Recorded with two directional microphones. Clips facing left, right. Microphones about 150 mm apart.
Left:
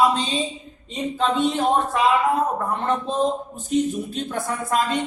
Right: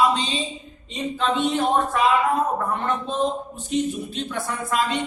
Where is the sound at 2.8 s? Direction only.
40° left (ahead or behind).